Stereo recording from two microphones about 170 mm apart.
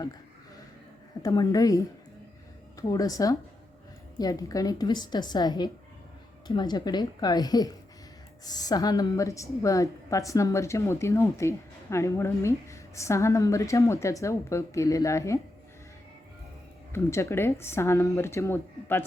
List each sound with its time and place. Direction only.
1.2 s a woman's voice: 20° left (ahead or behind)
16.9 s a woman's voice: 15° left (ahead or behind)